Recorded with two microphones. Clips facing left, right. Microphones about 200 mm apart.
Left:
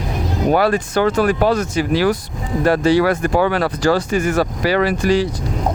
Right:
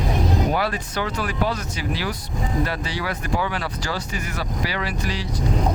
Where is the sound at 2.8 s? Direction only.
90° left.